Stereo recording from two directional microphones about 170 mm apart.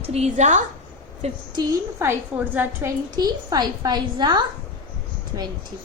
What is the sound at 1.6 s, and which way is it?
A woman's voice, 15° right (ahead or behind).